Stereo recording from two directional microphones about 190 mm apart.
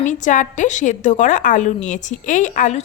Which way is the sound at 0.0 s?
40° left (ahead or behind).